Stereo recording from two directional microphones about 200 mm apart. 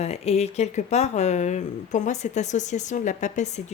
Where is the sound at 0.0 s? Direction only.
30° left (ahead or behind).